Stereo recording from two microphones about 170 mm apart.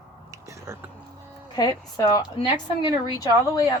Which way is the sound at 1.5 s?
25° left (ahead or behind).